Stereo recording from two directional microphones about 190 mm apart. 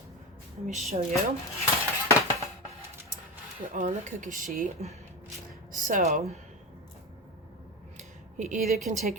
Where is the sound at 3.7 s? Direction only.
45° right (ahead or behind).